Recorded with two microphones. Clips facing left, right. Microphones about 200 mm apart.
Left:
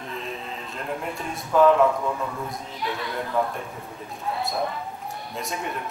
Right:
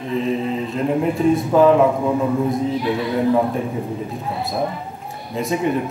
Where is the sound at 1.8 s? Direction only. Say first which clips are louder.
Right 5 dB; 15° right (ahead or behind).